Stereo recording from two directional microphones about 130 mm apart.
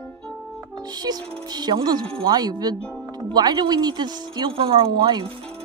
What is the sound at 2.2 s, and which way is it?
Speech, 30° right (ahead or behind).